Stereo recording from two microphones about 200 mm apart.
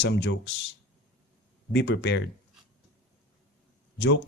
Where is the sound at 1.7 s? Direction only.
60° left (ahead or behind).